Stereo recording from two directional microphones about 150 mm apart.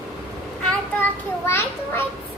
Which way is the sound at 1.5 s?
15° left (ahead or behind).